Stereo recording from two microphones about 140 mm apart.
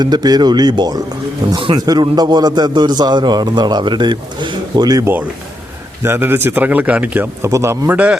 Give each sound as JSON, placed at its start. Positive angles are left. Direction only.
{"t": 0.0, "sound": "a man's voice", "side_deg": -30}
{"t": 6.0, "sound": "speech", "side_deg": -15}